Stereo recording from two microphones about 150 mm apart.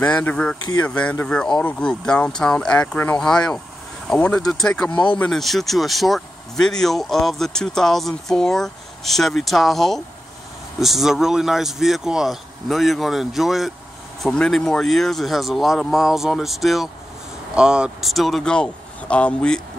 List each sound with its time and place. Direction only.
0.2 s speech: 10° left (ahead or behind)
4.9 s speech: 30° left (ahead or behind)
5.2 s speech: centre (ahead or behind)